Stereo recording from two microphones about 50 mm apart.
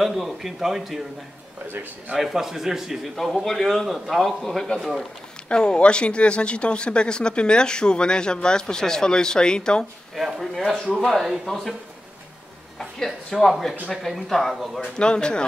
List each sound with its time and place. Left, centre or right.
0.0 s a man's voice: centre
2.1 s a man's voice: centre
10.1 s a man's voice: centre
11.4 s speech: centre
12.7 s a woman's voice: centre
15.0 s speech: centre